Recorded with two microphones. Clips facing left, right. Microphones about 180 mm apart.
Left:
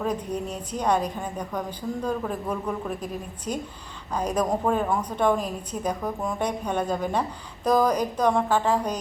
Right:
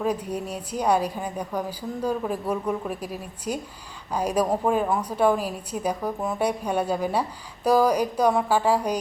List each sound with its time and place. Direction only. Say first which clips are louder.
0.0 s a woman's voice: right 1 dB; 10° right (ahead or behind)